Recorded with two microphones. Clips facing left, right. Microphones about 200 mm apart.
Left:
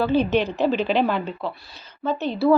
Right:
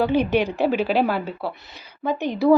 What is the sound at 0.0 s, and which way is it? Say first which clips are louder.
A woman's voice: even; 15° right (ahead or behind).